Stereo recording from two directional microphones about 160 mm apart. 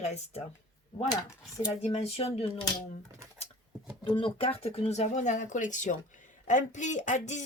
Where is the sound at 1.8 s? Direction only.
40° left (ahead or behind).